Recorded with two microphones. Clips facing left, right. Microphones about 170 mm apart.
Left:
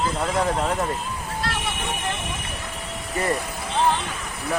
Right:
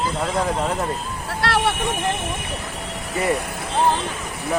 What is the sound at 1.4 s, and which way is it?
Vehicle, 70° right (ahead or behind).